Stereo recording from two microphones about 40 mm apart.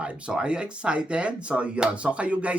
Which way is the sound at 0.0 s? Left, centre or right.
Right.